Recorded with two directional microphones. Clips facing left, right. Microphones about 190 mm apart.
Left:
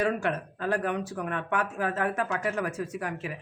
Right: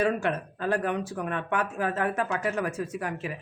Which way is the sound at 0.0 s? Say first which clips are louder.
Right 1 dB; 25° right (ahead or behind).